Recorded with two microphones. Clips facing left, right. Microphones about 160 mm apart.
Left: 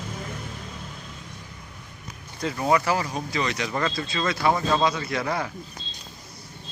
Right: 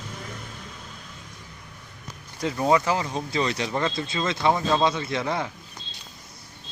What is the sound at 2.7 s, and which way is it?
Speech, 20° right (ahead or behind).